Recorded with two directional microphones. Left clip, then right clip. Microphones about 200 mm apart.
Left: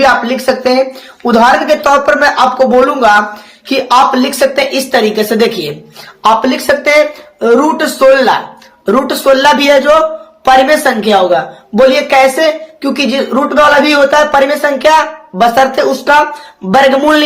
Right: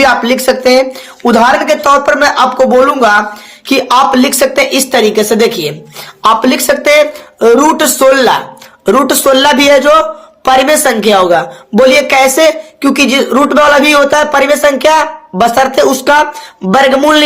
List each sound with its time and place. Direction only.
0.0 s a man's voice: 35° right (ahead or behind)
3.7 s a man's voice: 30° right (ahead or behind)